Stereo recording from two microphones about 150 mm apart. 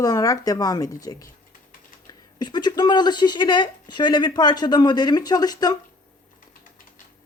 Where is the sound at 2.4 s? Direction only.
30° left (ahead or behind).